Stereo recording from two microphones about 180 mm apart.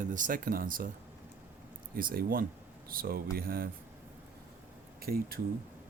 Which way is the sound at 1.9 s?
55° right (ahead or behind).